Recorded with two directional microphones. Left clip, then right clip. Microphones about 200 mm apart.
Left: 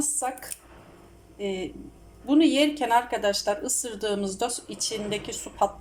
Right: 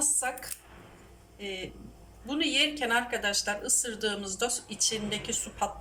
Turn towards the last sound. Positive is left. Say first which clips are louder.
# left 6 dB
turn(degrees=25)  # may be behind; listen again after turning